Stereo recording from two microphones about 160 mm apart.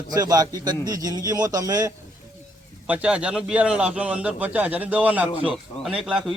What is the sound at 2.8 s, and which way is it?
A man's voice, 5° right (ahead or behind).